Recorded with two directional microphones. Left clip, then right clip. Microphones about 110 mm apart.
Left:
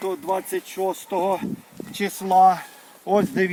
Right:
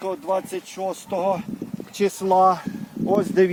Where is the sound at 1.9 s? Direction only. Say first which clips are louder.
Even; 55° right (ahead or behind).